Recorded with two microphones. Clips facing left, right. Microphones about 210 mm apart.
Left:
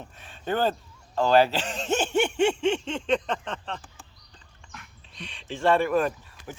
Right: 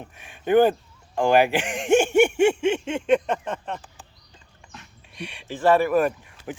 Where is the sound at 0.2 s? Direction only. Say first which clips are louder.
Right 9 dB; 15° right (ahead or behind).